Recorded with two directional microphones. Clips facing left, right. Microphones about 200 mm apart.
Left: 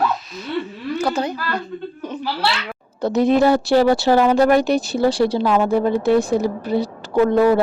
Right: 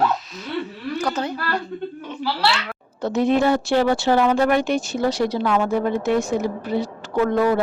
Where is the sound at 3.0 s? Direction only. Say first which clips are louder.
Left 3 dB; 40° left (ahead or behind).